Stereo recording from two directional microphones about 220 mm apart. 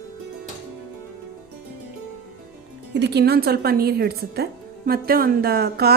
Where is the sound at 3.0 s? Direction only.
50° right (ahead or behind).